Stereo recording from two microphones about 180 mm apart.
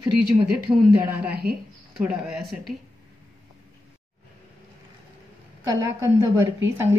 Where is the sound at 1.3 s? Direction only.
55° right (ahead or behind).